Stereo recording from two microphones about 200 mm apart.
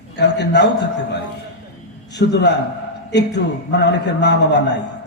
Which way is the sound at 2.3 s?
60° left (ahead or behind).